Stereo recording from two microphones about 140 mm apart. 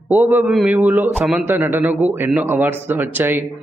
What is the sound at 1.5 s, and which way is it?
A man's voice, 15° right (ahead or behind).